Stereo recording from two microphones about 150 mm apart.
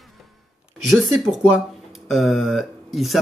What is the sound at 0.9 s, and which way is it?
Speech, centre (ahead or behind).